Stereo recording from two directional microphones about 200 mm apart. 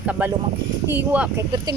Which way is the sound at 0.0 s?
5° right (ahead or behind).